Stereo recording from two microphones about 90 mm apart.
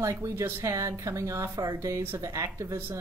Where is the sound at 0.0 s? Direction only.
35° right (ahead or behind).